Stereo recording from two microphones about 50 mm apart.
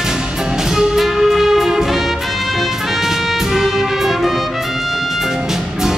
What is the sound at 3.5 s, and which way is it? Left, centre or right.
Music, centre.